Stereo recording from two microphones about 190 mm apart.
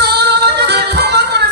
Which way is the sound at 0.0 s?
60° right (ahead or behind).